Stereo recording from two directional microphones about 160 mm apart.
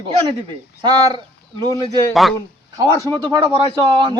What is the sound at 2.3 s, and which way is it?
Speech, 25° right (ahead or behind).